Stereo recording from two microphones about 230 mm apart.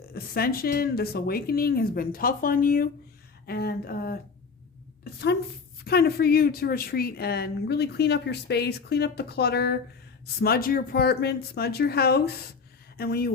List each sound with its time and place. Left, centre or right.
0.1 s speech: left
5.8 s a woman's voice: left